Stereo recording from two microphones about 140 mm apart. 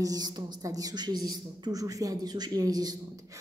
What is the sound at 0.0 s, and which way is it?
A woman's voice, 30° right (ahead or behind).